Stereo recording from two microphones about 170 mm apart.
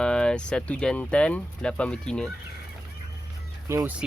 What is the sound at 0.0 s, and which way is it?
Speech, 5° left (ahead or behind).